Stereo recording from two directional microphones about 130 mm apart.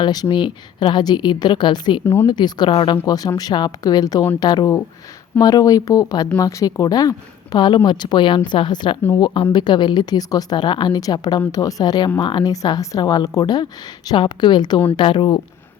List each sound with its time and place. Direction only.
0.0 s a woman's voice: 35° left (ahead or behind)
3.1 s a woman's voice: 30° left (ahead or behind)